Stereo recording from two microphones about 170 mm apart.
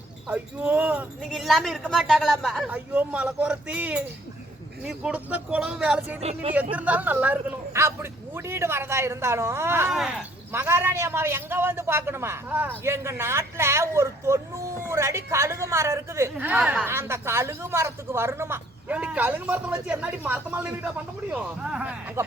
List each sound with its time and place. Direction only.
0.3 s a man's voice: 10° right (ahead or behind)
6.1 s speech: 35° right (ahead or behind)
6.7 s a man's voice: 10° right (ahead or behind)
9.9 s speech: centre (ahead or behind)
10.5 s a man's voice: 15° right (ahead or behind)